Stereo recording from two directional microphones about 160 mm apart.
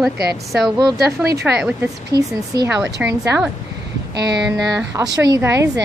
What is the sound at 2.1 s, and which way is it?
Speech, 85° right.